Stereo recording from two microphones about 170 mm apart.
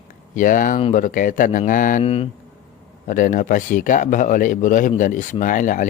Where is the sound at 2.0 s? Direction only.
35° left (ahead or behind).